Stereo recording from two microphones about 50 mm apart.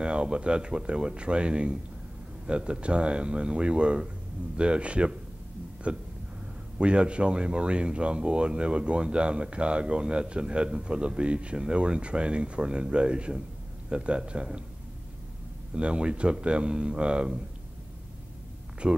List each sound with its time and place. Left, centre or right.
0.0 s speech: centre
15.7 s speech: right
18.8 s speech: right